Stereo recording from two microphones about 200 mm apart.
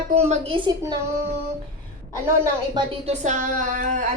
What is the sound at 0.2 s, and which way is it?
Speech, 30° right (ahead or behind).